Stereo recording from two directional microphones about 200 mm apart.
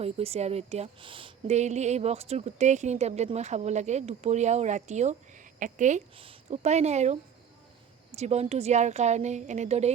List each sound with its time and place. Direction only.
0.0 s speech: 30° right (ahead or behind)